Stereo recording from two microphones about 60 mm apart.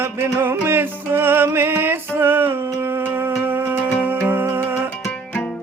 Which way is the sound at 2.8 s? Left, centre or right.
Right.